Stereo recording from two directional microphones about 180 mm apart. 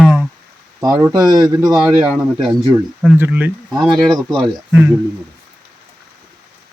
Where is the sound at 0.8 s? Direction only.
20° right (ahead or behind).